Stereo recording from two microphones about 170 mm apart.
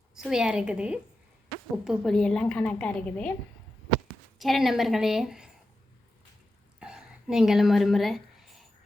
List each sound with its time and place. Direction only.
0.1 s a woman's voice: 5° right (ahead or behind)
4.4 s a woman's voice: centre (ahead or behind)
6.7 s a sound: 5° right (ahead or behind)